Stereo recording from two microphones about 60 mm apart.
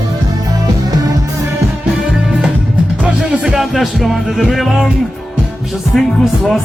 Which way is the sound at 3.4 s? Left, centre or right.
Centre.